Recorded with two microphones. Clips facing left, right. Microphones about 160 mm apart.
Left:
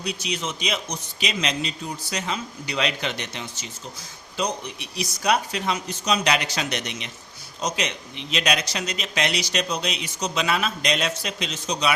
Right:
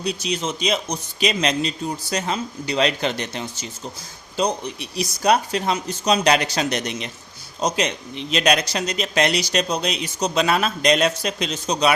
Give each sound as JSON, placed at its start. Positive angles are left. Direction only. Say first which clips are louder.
{"t": 0.0, "sound": "speech", "louder": "right 4 dB", "side_deg": -35}